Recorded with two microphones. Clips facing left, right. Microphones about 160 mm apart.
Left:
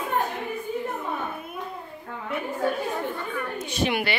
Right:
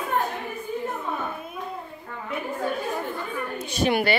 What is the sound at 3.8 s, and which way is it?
Speech, 40° right (ahead or behind).